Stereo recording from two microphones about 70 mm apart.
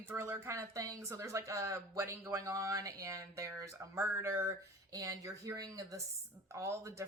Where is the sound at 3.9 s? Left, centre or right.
Right.